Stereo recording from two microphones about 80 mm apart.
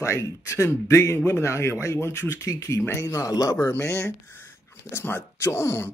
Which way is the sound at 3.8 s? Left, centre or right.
Left.